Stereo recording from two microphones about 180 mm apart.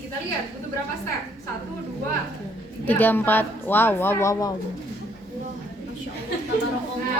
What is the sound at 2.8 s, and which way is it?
A woman's voice, 10° left (ahead or behind).